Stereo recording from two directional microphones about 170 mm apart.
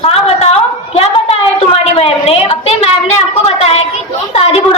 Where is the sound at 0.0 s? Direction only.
35° left (ahead or behind).